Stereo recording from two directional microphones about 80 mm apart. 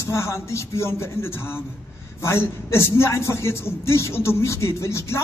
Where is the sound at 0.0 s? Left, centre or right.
Left.